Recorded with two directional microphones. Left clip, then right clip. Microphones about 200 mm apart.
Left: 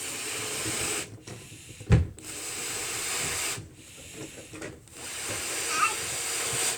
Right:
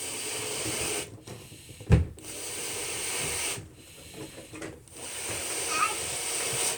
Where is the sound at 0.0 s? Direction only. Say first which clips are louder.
Left 1 dB; 15° left (ahead or behind).